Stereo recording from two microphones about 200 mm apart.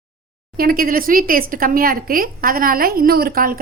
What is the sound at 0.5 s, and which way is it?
Speech, 45° right (ahead or behind).